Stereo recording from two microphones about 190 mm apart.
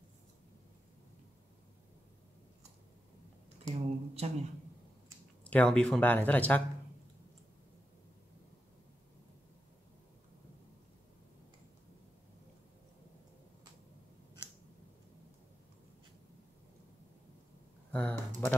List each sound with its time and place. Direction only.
3.7 s a sound: 35° right (ahead or behind)
5.4 s speech: 5° left (ahead or behind)
17.9 s speech: 5° left (ahead or behind)